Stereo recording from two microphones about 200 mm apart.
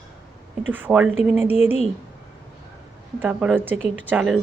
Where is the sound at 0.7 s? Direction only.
10° right (ahead or behind).